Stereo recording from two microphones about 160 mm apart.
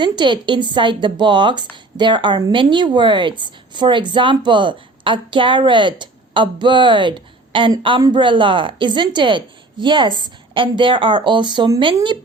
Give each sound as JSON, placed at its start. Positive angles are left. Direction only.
{"t": 0.0, "sound": "a woman's voice", "side_deg": -30}